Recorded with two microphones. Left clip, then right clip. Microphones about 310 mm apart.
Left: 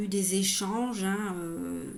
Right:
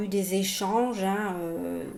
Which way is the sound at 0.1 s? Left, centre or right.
Centre.